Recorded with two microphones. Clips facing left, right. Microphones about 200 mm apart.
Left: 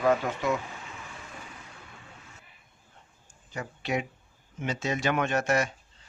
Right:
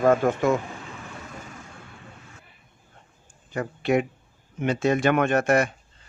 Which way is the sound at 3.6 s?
55° right (ahead or behind).